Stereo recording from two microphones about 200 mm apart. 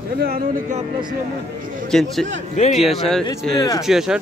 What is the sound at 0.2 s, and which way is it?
Speech, 50° right (ahead or behind).